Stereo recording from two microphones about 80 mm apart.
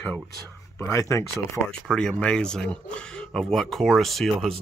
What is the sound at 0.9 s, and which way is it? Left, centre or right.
Speech, left.